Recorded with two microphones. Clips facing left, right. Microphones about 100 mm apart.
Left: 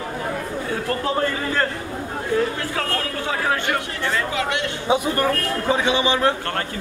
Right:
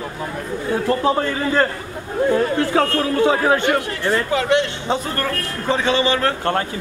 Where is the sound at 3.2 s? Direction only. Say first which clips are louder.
Right 9 dB; 25° right (ahead or behind).